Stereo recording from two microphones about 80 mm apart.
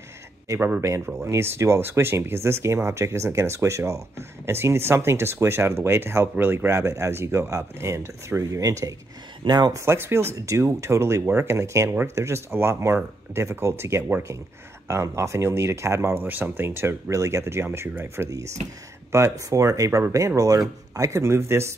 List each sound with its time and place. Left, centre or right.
0.7 s speech: right
9.4 s speech: right
9.8 s speech: right
16.2 s speech: right
19.1 s speech: right